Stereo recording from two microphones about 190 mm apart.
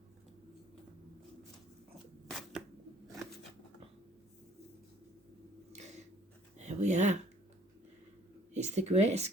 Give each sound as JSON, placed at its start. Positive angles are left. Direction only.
{"t": 2.3, "sound": "shuffling cards", "side_deg": 0}
{"t": 6.6, "sound": "a sound", "side_deg": -40}
{"t": 8.5, "sound": "speech", "side_deg": -35}